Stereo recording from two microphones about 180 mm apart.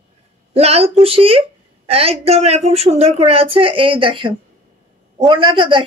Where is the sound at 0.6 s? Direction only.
35° right (ahead or behind).